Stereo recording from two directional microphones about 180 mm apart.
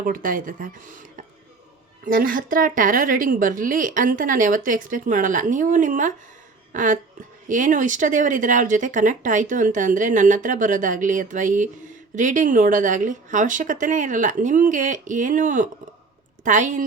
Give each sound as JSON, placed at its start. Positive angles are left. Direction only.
{"t": 0.0, "sound": "speech", "side_deg": -50}
{"t": 2.0, "sound": "speech", "side_deg": -50}